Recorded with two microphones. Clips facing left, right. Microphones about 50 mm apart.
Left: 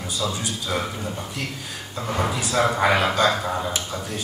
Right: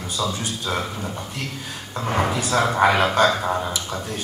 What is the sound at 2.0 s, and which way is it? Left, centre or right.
Speech, right.